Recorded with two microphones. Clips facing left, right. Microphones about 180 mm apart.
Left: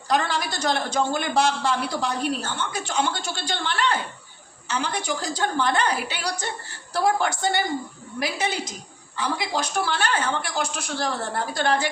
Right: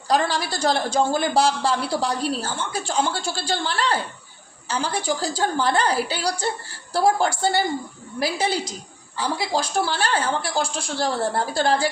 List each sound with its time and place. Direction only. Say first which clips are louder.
0.1 s a woman's voice: right 2 dB; 30° right (ahead or behind)